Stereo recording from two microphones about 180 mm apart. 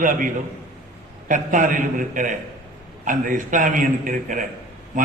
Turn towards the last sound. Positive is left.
turn(degrees=-45)  # may be behind; listen again after turning